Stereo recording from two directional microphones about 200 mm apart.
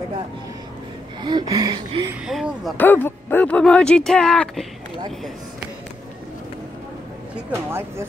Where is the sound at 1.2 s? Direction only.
20° right (ahead or behind).